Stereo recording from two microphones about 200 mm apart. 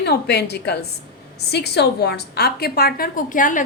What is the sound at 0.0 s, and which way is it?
A woman's voice, 55° left (ahead or behind).